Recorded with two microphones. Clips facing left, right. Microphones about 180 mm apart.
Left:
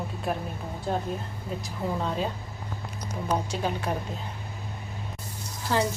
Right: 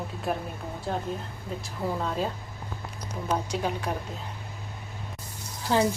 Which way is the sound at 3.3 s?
Centre (ahead or behind).